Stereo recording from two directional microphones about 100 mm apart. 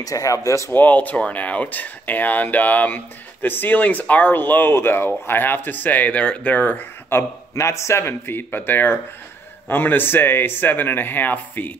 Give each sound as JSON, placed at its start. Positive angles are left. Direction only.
{"t": 0.0, "sound": "speech", "side_deg": 35}
{"t": 0.7, "sound": "speech", "side_deg": 15}